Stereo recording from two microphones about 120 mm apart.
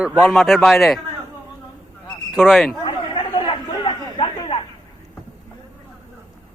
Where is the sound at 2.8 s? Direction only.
40° left (ahead or behind).